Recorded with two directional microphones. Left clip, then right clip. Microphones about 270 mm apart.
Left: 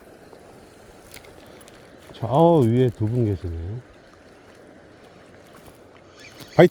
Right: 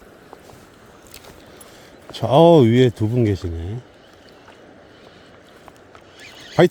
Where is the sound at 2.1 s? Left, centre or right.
Right.